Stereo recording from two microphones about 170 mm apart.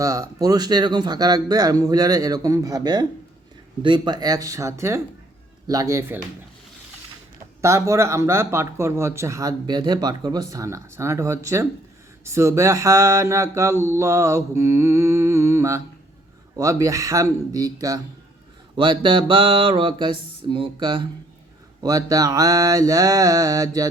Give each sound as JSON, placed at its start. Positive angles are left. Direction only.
{"t": 0.0, "sound": "speech", "side_deg": -20}
{"t": 7.6, "sound": "speech", "side_deg": -15}